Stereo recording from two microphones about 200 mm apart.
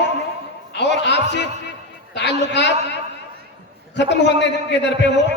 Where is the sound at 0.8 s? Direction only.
60° left (ahead or behind).